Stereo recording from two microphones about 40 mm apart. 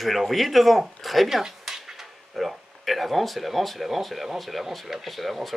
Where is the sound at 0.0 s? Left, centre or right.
Centre.